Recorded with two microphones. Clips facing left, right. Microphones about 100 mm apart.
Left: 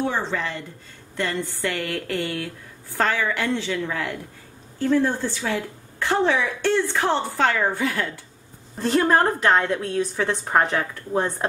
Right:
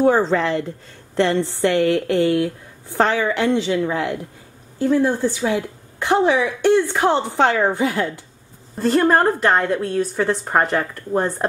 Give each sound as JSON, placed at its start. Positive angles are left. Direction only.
{"t": 0.0, "sound": "speech", "side_deg": -40}
{"t": 0.4, "sound": "a woman's voice", "side_deg": -90}
{"t": 1.2, "sound": "a woman's voice", "side_deg": -75}
{"t": 1.6, "sound": "a woman's voice", "side_deg": -25}
{"t": 8.7, "sound": "a woman's voice", "side_deg": 0}